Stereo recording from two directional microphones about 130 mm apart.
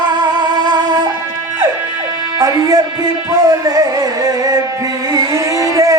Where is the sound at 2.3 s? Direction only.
30° right (ahead or behind).